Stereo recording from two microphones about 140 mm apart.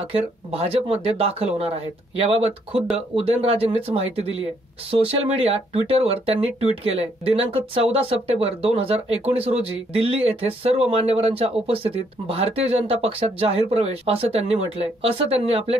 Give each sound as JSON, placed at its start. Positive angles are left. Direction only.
{"t": 0.0, "sound": "speech", "side_deg": -45}